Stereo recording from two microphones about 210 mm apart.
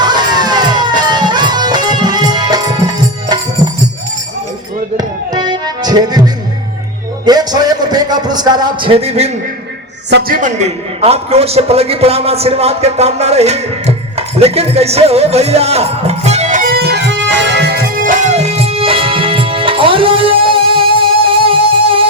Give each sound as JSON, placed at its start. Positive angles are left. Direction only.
{"t": 0.0, "sound": "music", "side_deg": -20}
{"t": 4.9, "sound": "music", "side_deg": -20}
{"t": 7.3, "sound": "a man's voice", "side_deg": -20}
{"t": 10.1, "sound": "a sound", "side_deg": -50}